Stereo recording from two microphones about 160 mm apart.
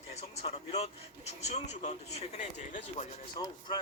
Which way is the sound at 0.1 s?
40° left (ahead or behind).